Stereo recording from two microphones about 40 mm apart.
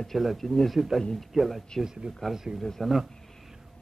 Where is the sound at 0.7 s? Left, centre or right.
Centre.